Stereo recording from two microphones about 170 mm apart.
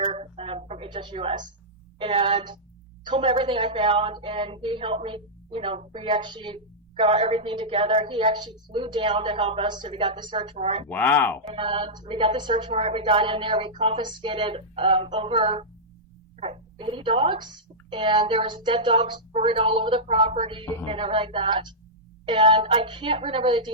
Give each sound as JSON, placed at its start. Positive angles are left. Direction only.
{"t": 0.0, "sound": "a sound", "side_deg": -40}
{"t": 2.0, "sound": "speech", "side_deg": -30}
{"t": 10.8, "sound": "speech", "side_deg": 10}
{"t": 11.5, "sound": "a woman's voice", "side_deg": -30}